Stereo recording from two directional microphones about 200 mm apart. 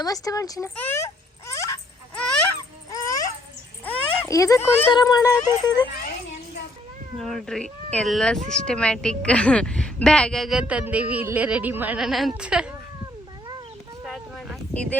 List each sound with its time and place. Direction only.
0.0 s speech: 20° left (ahead or behind)
1.5 s wail: 15° left (ahead or behind)
2.6 s baby cry: 20° left (ahead or behind)
3.8 s a sound: 15° left (ahead or behind)
4.8 s speech: 20° left (ahead or behind)
7.2 s speech: centre (ahead or behind)
14.0 s a sound: centre (ahead or behind)